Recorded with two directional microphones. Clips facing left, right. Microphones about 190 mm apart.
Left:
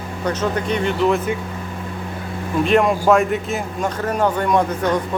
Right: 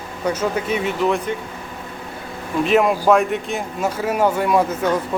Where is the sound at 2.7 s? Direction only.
Centre (ahead or behind).